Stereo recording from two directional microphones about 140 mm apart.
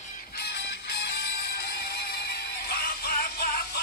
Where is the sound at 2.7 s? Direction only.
90° left.